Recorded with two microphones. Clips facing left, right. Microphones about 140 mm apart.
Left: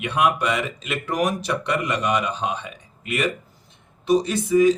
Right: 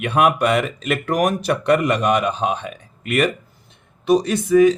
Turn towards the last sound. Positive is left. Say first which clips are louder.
# right 3 dB
turn(degrees=-65)  # may be behind; listen again after turning